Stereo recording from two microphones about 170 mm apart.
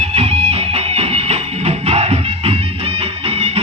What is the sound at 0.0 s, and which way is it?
Music, 35° right (ahead or behind).